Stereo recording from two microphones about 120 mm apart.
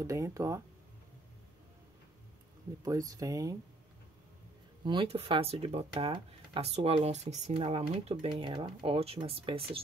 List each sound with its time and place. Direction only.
0.0 s speech: 25° right (ahead or behind)
2.8 s speech: 30° right (ahead or behind)
4.8 s speech: 50° right (ahead or behind); by 7.5 s 65° right (ahead or behind)
7.5 s speech: 55° right (ahead or behind)